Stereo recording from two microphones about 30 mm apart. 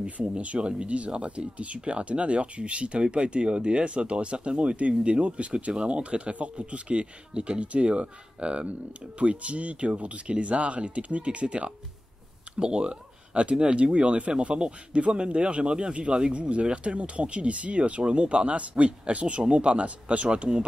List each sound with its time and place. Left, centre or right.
0.6 s speech: right
0.8 s speech: right
14.4 s speech: right
14.9 s speech: right
15.1 s speech: right